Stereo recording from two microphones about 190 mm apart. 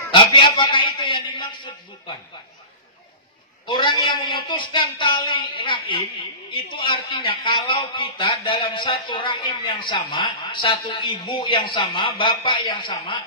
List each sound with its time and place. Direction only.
0.1 s a woman's voice: 25° left (ahead or behind)
3.6 s a woman's voice: 25° left (ahead or behind)